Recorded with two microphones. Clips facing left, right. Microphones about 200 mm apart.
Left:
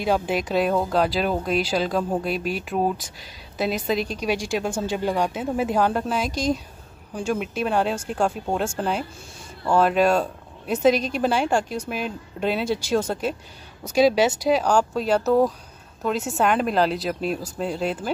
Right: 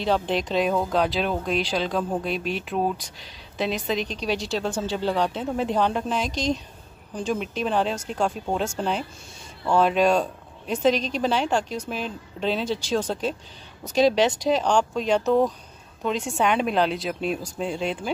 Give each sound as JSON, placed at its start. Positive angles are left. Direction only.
{"t": 0.0, "sound": "speech", "side_deg": 10}